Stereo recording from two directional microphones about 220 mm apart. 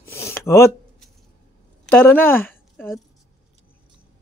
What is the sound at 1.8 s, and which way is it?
Speech, 10° left (ahead or behind).